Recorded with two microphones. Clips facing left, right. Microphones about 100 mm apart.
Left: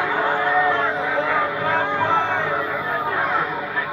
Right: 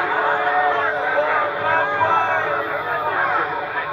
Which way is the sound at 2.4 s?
25° right (ahead or behind).